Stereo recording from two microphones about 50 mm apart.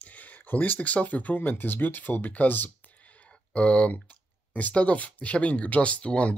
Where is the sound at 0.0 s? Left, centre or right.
Left.